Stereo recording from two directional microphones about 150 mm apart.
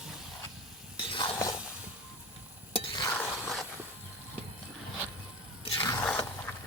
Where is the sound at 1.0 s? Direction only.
35° left (ahead or behind).